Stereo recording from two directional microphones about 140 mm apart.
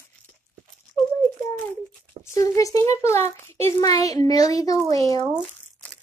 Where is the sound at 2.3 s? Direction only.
25° left (ahead or behind).